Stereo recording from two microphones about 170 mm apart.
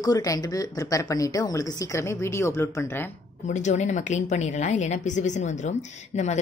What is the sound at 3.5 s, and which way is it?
A woman's voice, 45° left (ahead or behind).